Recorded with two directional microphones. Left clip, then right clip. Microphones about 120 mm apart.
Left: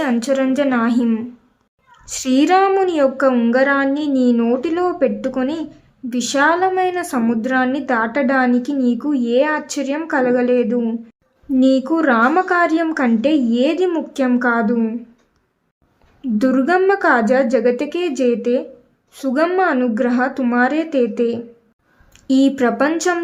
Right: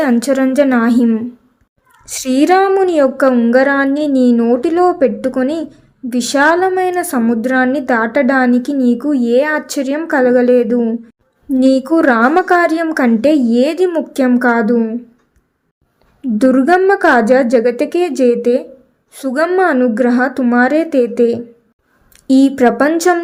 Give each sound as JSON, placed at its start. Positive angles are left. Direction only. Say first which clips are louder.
{"t": 0.0, "sound": "a woman's voice", "louder": "right 4 dB", "side_deg": -45}
{"t": 2.0, "sound": "a woman's voice", "louder": "right 3 dB", "side_deg": -35}
{"t": 16.4, "sound": "a woman's voice", "louder": "right 5 dB", "side_deg": -40}